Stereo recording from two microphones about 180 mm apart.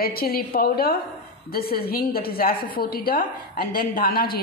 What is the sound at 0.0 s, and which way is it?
A woman's voice, 55° left (ahead or behind).